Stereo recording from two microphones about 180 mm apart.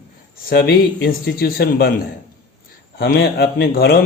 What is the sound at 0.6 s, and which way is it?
Speech, 60° left (ahead or behind).